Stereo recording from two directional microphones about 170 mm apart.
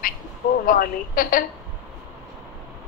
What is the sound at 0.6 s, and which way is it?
Speech, 55° left (ahead or behind).